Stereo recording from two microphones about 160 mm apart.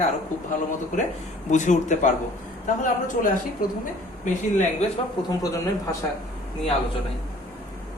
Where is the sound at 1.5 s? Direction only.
50° left (ahead or behind).